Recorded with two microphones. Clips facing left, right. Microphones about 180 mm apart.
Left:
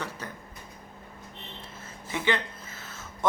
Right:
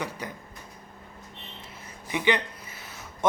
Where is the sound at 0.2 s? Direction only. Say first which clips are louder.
Right 3 dB; 15° right (ahead or behind).